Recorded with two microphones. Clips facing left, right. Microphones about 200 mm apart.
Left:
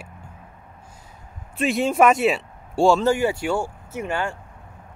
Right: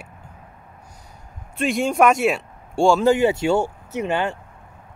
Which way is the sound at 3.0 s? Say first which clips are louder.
Right 4 dB; 20° right (ahead or behind).